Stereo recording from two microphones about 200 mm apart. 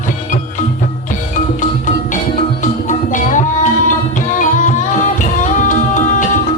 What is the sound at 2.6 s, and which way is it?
Music, 40° left (ahead or behind).